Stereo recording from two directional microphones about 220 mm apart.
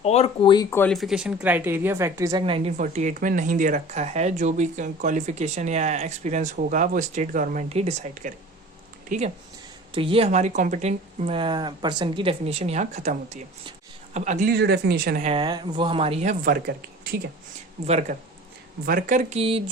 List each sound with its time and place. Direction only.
0.0 s speech: 30° left (ahead or behind); by 2.4 s 15° right (ahead or behind)
2.4 s speech: 25° right (ahead or behind)
14.5 s speech: 50° right (ahead or behind)
15.3 s speech: 20° right (ahead or behind); by 17.2 s 45° right (ahead or behind)
17.8 s speech: 30° right (ahead or behind)